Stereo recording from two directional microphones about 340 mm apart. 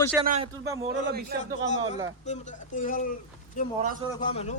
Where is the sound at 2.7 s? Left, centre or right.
Left.